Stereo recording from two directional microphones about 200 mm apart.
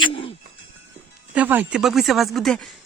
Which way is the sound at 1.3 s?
10° right (ahead or behind).